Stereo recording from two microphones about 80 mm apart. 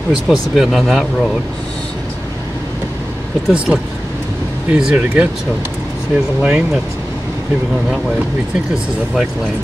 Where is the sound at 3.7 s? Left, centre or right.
Right.